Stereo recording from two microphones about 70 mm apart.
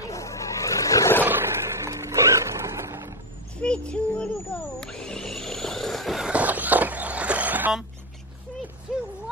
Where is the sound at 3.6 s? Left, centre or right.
Centre.